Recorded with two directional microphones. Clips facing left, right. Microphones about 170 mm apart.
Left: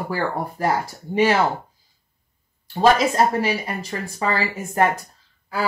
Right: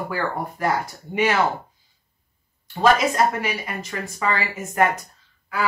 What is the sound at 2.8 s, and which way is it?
Speech, 30° left (ahead or behind).